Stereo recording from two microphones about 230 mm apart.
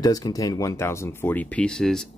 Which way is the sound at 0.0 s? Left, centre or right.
Centre.